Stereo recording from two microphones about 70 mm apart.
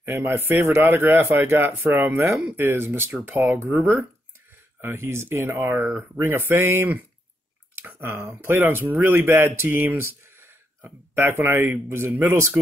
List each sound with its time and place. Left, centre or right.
0.0 s a man's voice: right
4.8 s a man's voice: right